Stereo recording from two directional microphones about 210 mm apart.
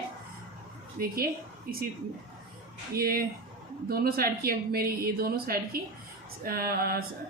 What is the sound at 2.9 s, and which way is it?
A woman's voice, 45° right (ahead or behind).